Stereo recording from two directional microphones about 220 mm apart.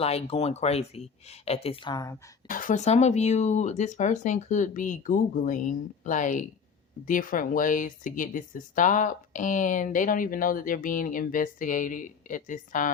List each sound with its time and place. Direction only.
0.0 s speech: 25° left (ahead or behind)
2.5 s speech: 35° left (ahead or behind)